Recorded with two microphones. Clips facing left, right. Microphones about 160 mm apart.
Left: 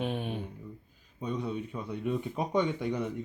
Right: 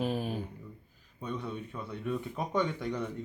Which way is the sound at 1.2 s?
15° left (ahead or behind).